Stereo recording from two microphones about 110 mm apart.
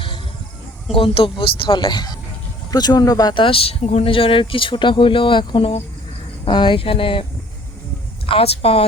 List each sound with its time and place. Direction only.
0.9 s speech: 55° left (ahead or behind); by 3.3 s 35° left (ahead or behind)
3.3 s speech: 55° left (ahead or behind)
8.3 s speech: 60° left (ahead or behind)